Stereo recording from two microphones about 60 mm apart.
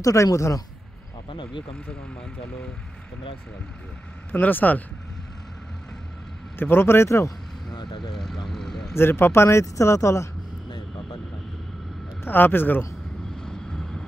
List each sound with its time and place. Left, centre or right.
0.0 s speech: left
4.3 s speech: left
6.6 s speech: left
7.1 s speech: left
8.2 s vehicle: centre
8.9 s speech: left
12.3 s speech: left
13.3 s vehicle: centre